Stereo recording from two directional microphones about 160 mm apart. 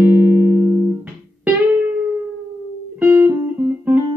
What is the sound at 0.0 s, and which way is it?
Music, 15° right (ahead or behind).